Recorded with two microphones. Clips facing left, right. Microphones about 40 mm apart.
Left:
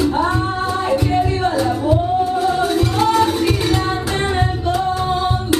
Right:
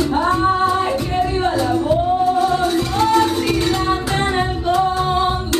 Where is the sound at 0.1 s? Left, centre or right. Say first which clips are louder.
Right 2 dB; centre.